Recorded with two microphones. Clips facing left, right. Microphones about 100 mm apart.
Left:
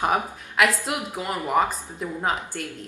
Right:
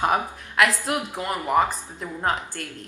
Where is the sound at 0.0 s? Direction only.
15° left (ahead or behind).